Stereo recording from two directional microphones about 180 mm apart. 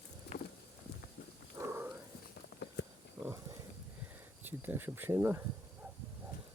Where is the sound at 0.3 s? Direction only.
65° left (ahead or behind).